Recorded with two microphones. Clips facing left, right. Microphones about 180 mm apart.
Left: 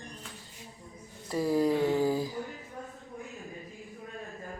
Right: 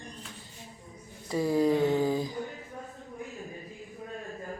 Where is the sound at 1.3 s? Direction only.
Centre (ahead or behind).